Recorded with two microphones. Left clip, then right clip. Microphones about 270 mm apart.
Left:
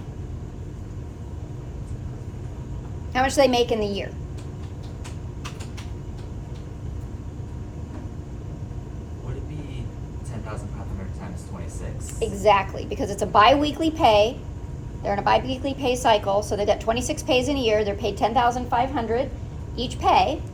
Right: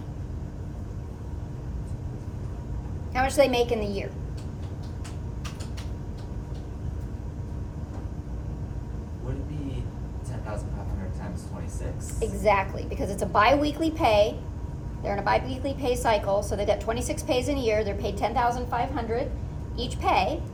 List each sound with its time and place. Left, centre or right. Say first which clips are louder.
3.1 s a woman's voice: left 3 dB; left
12.2 s a woman's voice: left 4 dB; left